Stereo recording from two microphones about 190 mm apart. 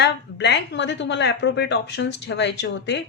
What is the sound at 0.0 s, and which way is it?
A woman's voice, 65° left (ahead or behind).